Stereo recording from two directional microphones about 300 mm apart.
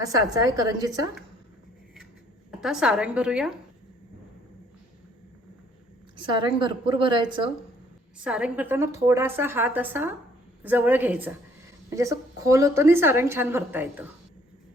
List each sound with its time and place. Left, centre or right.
0.0 s a woman's voice: centre
2.5 s a woman's voice: centre
6.1 s a woman's voice: centre
8.2 s a woman's voice: centre